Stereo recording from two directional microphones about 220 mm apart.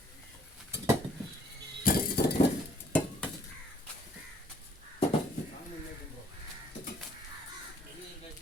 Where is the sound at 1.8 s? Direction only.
40° left (ahead or behind).